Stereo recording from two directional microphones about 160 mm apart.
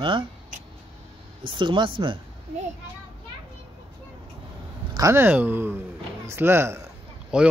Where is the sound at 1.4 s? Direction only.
30° right (ahead or behind).